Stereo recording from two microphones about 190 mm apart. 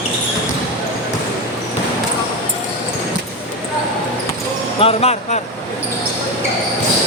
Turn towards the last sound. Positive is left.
turn(degrees=30)  # may be behind; listen again after turning